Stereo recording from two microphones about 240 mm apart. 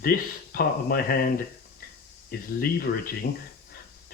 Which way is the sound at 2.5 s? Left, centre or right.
Left.